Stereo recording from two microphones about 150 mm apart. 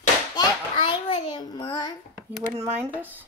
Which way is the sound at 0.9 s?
30° left (ahead or behind).